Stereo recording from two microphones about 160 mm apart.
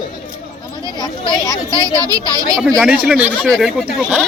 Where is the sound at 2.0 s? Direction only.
25° right (ahead or behind).